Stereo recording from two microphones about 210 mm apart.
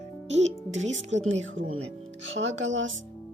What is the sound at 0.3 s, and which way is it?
Speech, 35° right (ahead or behind).